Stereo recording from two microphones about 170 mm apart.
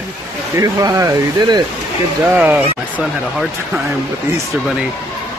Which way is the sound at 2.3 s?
10° right (ahead or behind).